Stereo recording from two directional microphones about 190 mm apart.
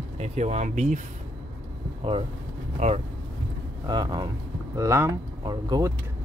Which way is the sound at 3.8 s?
20° right (ahead or behind).